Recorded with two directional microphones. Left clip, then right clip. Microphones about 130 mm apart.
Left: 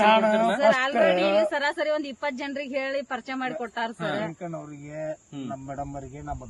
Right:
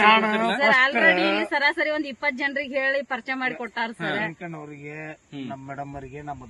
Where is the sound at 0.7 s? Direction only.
90° right.